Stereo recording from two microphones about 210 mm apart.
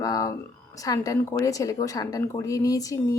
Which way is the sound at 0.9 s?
15° left (ahead or behind).